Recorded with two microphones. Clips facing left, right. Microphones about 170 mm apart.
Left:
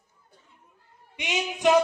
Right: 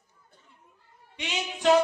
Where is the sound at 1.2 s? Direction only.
15° left (ahead or behind).